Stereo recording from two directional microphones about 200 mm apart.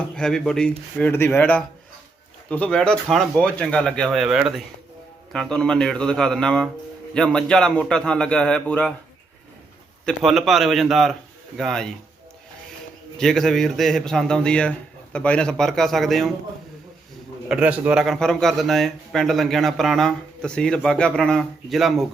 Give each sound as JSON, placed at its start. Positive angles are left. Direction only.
{"t": 0.2, "sound": "a man's voice", "side_deg": 5}
{"t": 10.1, "sound": "a man's voice", "side_deg": 0}
{"t": 13.1, "sound": "a man's voice", "side_deg": 0}
{"t": 17.5, "sound": "a man's voice", "side_deg": -5}